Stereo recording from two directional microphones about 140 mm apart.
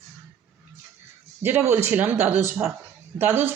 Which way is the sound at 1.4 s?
15° right (ahead or behind).